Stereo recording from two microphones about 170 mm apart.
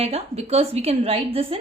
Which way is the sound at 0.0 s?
35° right (ahead or behind).